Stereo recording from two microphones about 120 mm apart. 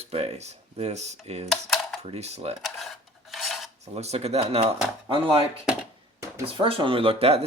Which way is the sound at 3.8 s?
65° right (ahead or behind).